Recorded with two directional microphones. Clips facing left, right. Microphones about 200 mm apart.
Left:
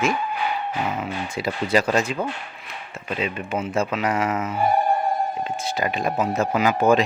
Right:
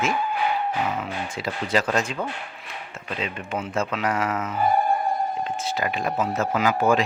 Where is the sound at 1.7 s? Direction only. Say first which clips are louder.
Left 3 dB; 10° left (ahead or behind).